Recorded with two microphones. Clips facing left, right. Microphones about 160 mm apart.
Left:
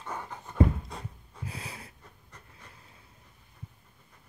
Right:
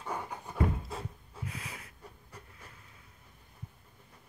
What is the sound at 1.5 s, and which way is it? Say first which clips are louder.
Snort: left 5 dB; 30° left (ahead or behind).